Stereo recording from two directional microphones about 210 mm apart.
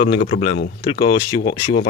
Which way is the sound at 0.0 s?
30° left (ahead or behind).